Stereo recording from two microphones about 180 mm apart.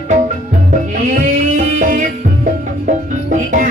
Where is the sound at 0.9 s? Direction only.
45° right (ahead or behind).